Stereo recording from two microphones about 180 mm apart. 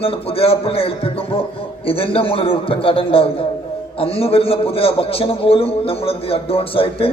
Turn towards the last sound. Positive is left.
turn(degrees=30)  # may be behind; listen again after turning